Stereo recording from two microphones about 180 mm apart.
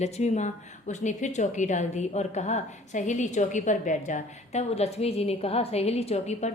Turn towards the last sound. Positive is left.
turn(degrees=35)  # may be behind; listen again after turning